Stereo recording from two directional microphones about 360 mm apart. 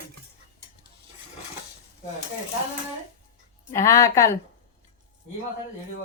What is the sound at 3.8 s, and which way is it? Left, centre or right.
Speech, centre.